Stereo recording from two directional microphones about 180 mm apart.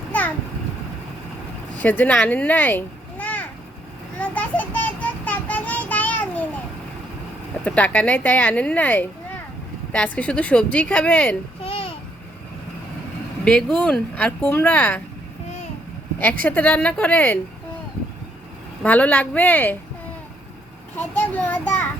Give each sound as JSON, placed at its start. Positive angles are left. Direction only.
{"t": 0.1, "sound": "a sound", "side_deg": 10}
{"t": 1.8, "sound": "a child's voice", "side_deg": 10}
{"t": 4.2, "sound": "child singing", "side_deg": 10}
{"t": 7.6, "sound": "speech", "side_deg": 10}
{"t": 11.6, "sound": "babbling", "side_deg": 30}
{"t": 13.4, "sound": "speech", "side_deg": 5}
{"t": 16.4, "sound": "speech", "side_deg": 10}
{"t": 18.8, "sound": "speech", "side_deg": 10}
{"t": 20.9, "sound": "a child's voice", "side_deg": 10}